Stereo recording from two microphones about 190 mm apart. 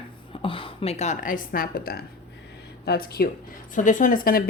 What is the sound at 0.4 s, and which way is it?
Speech, 30° left (ahead or behind).